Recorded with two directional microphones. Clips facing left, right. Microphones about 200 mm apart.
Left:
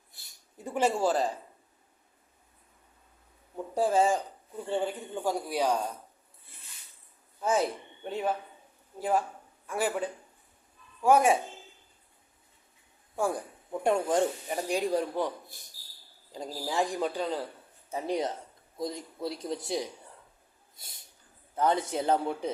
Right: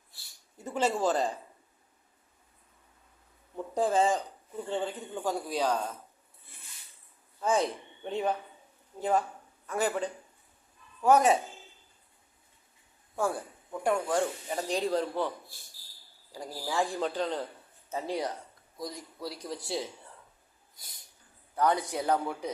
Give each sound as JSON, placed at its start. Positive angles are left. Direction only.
{"t": 0.1, "sound": "speech", "side_deg": 20}
{"t": 3.5, "sound": "speech", "side_deg": 10}
{"t": 7.3, "sound": "speech", "side_deg": 5}
{"t": 13.1, "sound": "speech", "side_deg": 15}
{"t": 14.7, "sound": "speech", "side_deg": 10}